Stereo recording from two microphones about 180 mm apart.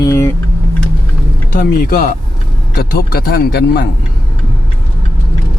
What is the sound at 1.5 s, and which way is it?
Speech, 50° left (ahead or behind).